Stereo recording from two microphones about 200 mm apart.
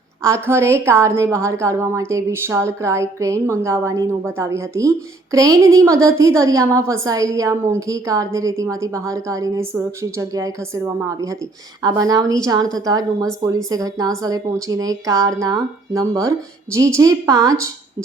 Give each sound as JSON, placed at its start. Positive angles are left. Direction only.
{"t": 0.2, "sound": "a woman's voice", "side_deg": -15}